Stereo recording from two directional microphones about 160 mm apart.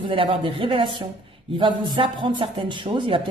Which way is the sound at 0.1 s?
35° right (ahead or behind).